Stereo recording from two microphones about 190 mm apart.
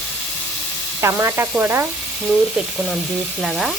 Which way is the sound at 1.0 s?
15° right (ahead or behind).